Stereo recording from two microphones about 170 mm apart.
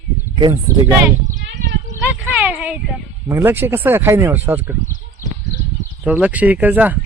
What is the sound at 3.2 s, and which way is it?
Speech, 10° right (ahead or behind).